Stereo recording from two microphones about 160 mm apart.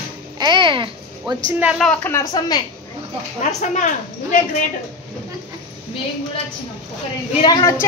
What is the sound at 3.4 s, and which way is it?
Speech, 50° left (ahead or behind).